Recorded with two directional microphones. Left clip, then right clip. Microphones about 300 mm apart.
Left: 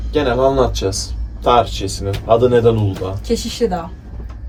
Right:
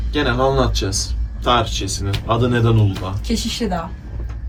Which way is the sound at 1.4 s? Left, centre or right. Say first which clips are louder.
Left 4 dB; centre.